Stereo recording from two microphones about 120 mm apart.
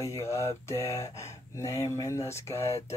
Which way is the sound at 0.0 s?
25° left (ahead or behind).